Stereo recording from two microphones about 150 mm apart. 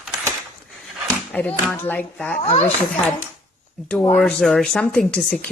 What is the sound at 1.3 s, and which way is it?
Speech, 10° left (ahead or behind).